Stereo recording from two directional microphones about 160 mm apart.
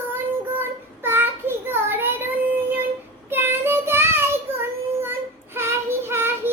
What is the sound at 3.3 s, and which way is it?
Child singing, 15° right (ahead or behind).